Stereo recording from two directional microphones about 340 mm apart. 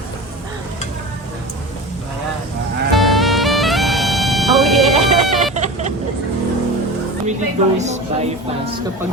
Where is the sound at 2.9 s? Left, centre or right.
Centre.